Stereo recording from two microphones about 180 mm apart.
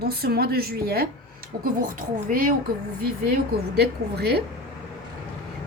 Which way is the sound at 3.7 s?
65° right (ahead or behind).